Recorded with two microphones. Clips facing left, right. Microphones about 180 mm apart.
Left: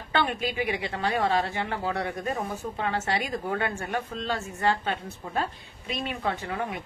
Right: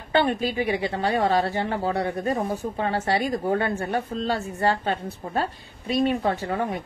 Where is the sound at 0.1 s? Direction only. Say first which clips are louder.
Right 5 dB; 35° right (ahead or behind).